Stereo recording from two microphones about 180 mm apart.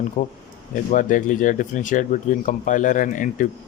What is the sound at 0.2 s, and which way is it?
Speech, 45° left (ahead or behind).